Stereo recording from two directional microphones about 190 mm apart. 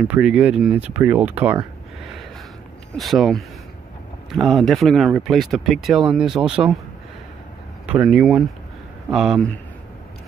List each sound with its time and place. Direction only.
0.0 s speech: 5° right (ahead or behind)
3.0 s speech: centre (ahead or behind)
7.8 s speech: 5° right (ahead or behind)